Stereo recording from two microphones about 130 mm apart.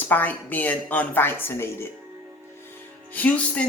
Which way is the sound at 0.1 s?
15° left (ahead or behind).